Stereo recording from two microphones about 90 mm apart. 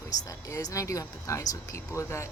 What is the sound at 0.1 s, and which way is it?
Speech, 40° left (ahead or behind).